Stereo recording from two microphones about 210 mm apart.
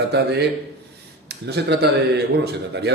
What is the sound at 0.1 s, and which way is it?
Speech, 55° right (ahead or behind).